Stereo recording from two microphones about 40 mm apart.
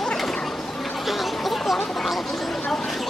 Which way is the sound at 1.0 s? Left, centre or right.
Centre.